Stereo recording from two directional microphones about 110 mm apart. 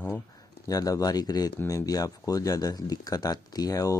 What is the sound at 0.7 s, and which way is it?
Speech, 35° left (ahead or behind).